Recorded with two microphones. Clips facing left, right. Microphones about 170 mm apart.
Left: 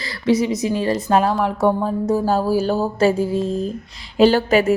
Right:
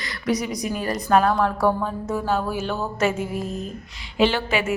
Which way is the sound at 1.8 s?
35° left (ahead or behind).